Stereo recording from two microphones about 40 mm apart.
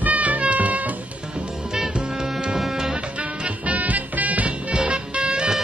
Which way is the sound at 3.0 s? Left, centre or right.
Right.